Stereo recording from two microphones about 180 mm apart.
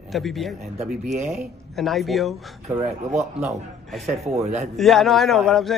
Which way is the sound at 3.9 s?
Centre (ahead or behind).